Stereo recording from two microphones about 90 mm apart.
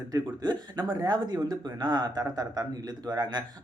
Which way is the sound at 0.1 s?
55° right (ahead or behind).